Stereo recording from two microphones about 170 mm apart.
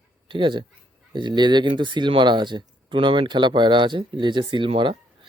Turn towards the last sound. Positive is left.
turn(degrees=-30)  # may be behind; listen again after turning